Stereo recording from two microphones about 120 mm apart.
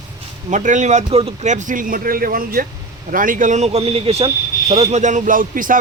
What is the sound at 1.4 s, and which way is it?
Speech, 90° right.